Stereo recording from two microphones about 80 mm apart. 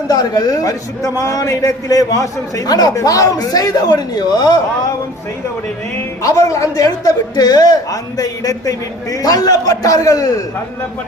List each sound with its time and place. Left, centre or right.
0.1 s speech: left
6.2 s speech: left